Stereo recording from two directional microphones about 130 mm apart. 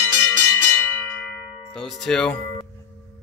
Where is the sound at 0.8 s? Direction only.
15° left (ahead or behind).